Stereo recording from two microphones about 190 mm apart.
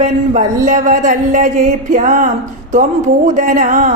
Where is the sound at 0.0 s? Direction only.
40° right (ahead or behind).